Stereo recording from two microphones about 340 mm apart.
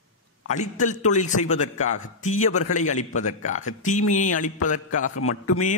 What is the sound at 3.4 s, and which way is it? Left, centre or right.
Speech, left.